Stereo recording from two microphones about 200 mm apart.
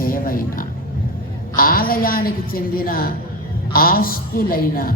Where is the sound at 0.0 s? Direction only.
45° left (ahead or behind).